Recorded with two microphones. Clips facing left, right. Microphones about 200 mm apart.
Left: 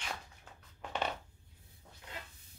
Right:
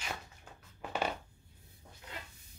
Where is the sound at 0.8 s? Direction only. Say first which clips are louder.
Right 2 dB; 5° right (ahead or behind).